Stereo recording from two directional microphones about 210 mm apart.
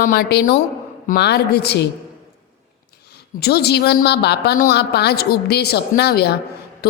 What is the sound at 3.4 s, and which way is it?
A woman's voice, 50° left (ahead or behind).